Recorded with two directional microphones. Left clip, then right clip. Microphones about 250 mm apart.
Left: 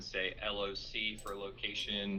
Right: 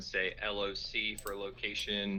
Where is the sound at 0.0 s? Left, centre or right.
Right.